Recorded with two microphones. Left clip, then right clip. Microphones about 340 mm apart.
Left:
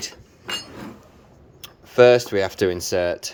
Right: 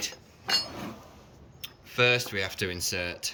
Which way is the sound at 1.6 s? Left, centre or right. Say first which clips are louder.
Left 11 dB; centre.